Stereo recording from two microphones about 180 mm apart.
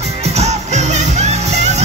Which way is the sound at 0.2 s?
35° right (ahead or behind).